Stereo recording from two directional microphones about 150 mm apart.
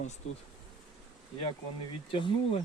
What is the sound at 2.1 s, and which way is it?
Speech, 35° left (ahead or behind).